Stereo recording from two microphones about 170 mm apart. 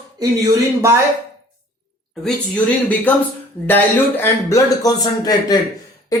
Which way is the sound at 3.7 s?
10° left (ahead or behind).